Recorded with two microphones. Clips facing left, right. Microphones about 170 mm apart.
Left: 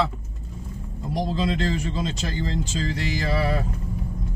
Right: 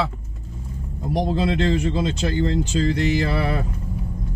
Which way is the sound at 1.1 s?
55° right (ahead or behind).